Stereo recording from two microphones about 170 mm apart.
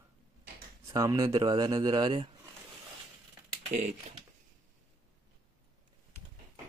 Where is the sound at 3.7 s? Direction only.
45° right (ahead or behind).